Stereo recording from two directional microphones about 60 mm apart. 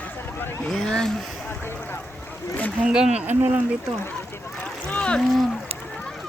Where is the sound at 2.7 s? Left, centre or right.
Centre.